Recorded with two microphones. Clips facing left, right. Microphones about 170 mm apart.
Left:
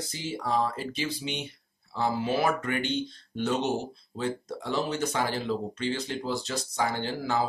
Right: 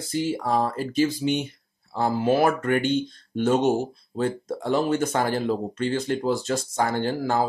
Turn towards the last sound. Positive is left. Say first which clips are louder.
# right 5 dB
turn(degrees=-50)  # may be behind; listen again after turning